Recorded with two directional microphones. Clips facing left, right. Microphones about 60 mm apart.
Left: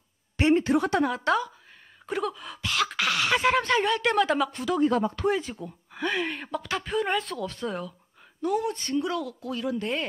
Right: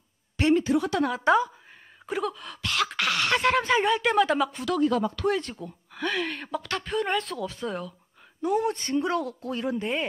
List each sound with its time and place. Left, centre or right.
0.6 s a woman's voice: left
1.2 s a woman's voice: centre
4.8 s speech: left
5.2 s speech: centre
8.4 s speech: right
9.0 s speech: right
9.8 s speech: centre